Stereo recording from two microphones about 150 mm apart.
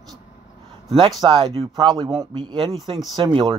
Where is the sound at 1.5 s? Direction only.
35° right (ahead or behind).